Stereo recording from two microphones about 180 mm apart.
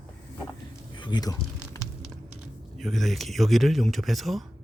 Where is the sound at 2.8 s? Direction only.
Centre (ahead or behind).